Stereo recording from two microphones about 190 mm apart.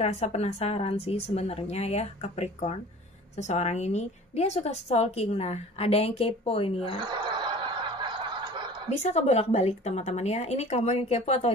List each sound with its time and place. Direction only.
0.0 s a woman's voice: 35° left (ahead or behind)
7.1 s snicker: 25° right (ahead or behind)
8.9 s a woman's voice: 35° left (ahead or behind)